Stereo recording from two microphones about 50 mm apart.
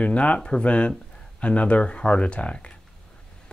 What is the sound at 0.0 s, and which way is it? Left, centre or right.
Speech, left.